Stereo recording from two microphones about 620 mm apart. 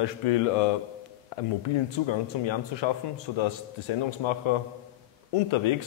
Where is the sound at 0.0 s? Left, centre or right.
Left.